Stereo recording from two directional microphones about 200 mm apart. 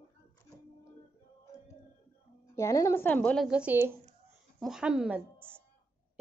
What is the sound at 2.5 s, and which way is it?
Speech, 15° left (ahead or behind).